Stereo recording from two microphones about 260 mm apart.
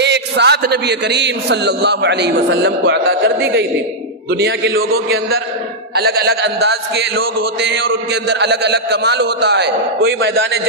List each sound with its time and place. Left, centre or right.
0.0 s a man's voice: right